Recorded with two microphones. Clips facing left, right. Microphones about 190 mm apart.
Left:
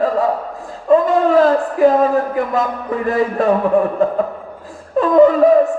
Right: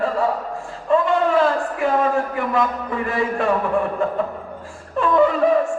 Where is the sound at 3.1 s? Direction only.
35° left (ahead or behind).